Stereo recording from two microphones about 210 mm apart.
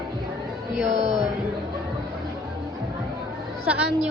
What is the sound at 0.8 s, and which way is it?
Speech, 35° right (ahead or behind).